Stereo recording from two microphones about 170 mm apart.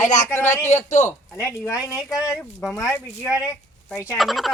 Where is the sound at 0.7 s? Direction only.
40° left (ahead or behind).